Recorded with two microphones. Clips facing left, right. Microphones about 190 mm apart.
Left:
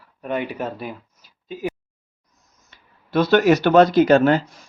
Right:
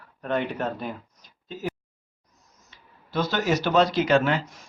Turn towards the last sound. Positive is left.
turn(degrees=40)  # may be behind; listen again after turning